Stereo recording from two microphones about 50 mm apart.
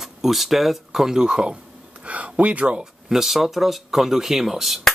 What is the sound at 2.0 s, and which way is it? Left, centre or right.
Speech, right.